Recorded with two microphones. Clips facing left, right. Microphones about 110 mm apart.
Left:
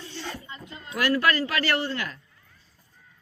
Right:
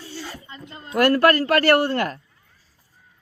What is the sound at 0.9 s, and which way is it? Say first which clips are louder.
A man's voice: right 7 dB; 50° right (ahead or behind).